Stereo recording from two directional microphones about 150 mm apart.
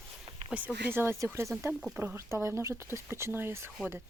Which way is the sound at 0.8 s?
15° right (ahead or behind).